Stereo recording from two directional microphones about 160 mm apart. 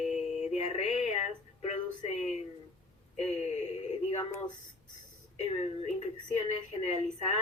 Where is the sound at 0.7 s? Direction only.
45° left (ahead or behind).